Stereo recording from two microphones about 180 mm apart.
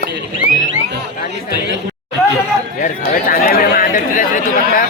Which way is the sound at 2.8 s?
50° left (ahead or behind).